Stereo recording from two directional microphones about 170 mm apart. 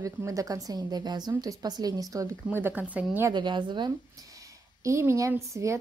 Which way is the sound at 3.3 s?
25° right (ahead or behind).